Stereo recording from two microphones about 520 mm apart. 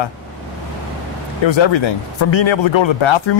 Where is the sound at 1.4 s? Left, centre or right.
Left.